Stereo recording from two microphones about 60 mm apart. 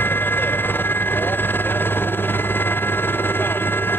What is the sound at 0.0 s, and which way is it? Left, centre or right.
Vehicle, left.